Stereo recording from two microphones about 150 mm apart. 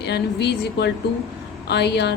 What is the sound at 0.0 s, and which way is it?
Speech, 90° left.